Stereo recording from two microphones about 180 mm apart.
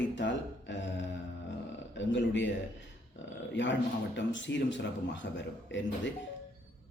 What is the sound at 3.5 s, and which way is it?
A man's voice, 90° left.